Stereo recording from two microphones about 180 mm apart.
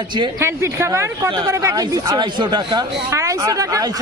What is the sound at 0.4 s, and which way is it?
Speech, 15° right (ahead or behind).